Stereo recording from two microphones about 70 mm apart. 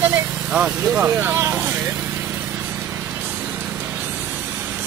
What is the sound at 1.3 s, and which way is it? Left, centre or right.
Speech, right.